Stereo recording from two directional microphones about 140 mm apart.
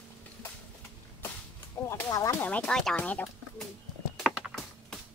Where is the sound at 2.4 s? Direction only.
5° left (ahead or behind).